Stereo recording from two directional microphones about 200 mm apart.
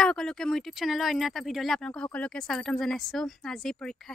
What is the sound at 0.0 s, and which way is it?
Speech, 5° left (ahead or behind).